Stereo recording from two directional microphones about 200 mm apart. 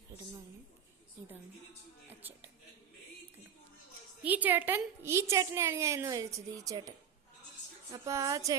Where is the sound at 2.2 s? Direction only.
10° right (ahead or behind).